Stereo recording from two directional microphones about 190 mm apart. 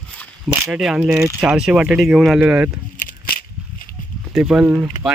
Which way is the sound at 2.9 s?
45° left (ahead or behind).